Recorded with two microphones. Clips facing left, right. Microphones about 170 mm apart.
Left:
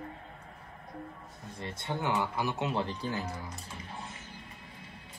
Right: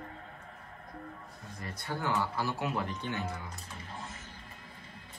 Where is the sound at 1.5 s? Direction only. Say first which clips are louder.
Left 2 dB; 25° left (ahead or behind).